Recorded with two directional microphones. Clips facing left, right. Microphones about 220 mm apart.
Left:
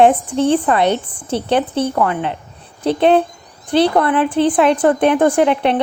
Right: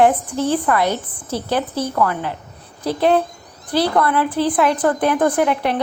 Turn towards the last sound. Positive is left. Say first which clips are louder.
# left 4 dB
turn(degrees=25)  # may be behind; listen again after turning